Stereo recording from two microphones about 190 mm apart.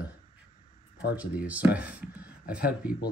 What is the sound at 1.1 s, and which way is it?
Speech, 5° right (ahead or behind).